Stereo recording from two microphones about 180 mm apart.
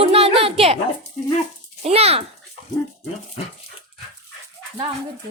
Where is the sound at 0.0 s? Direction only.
35° right (ahead or behind).